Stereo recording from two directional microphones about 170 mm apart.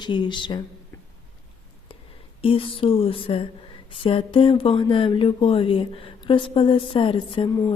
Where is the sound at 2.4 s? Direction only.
30° left (ahead or behind).